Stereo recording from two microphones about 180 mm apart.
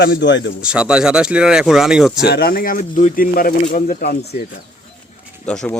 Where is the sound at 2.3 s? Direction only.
60° left (ahead or behind).